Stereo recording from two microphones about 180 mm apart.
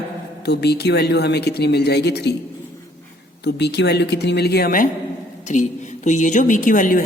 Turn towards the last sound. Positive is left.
turn(degrees=50)  # may be behind; listen again after turning